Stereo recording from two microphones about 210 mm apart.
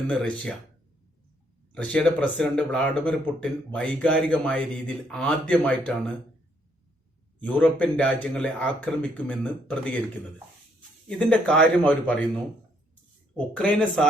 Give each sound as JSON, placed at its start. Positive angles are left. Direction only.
{"t": 0.1, "sound": "a man's voice", "side_deg": 5}
{"t": 1.7, "sound": "a man's voice", "side_deg": 5}
{"t": 7.3, "sound": "speech", "side_deg": 5}
{"t": 11.2, "sound": "speech", "side_deg": 5}
{"t": 13.3, "sound": "a man's voice", "side_deg": 5}